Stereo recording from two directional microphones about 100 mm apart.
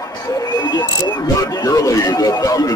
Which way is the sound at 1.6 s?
35° left (ahead or behind).